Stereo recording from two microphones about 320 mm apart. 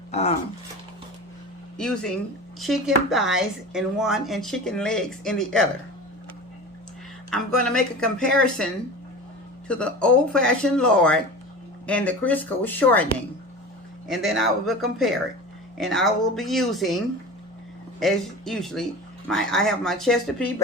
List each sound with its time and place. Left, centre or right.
0.1 s speech: centre
1.8 s speech: centre
7.3 s speech: centre
9.6 s speech: centre
14.1 s speech: centre
18.0 s speech: centre